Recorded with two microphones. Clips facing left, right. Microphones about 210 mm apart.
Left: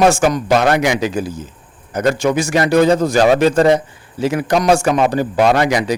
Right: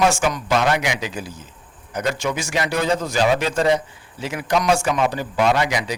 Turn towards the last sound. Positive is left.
turn(degrees=45)  # may be behind; listen again after turning